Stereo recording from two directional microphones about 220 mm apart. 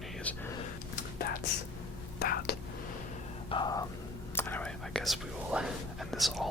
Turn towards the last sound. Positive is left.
turn(degrees=0)  # may be behind; listen again after turning